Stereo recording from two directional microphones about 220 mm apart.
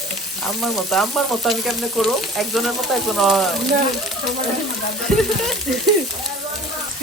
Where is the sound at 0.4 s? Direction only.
Centre (ahead or behind).